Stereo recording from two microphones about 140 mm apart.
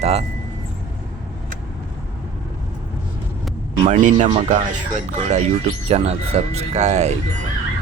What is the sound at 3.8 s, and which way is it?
Speech, 60° right (ahead or behind).